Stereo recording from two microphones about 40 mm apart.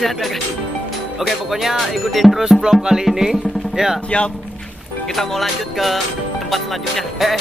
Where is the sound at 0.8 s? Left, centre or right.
Centre.